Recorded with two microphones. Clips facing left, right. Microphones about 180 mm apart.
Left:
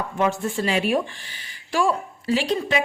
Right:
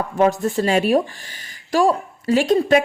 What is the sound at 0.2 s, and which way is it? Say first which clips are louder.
A woman's voice: right 6 dB; 40° right (ahead or behind).